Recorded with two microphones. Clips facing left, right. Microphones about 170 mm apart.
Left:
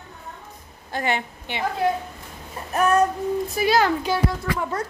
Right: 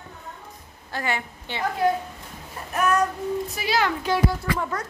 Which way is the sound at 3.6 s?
50° left (ahead or behind).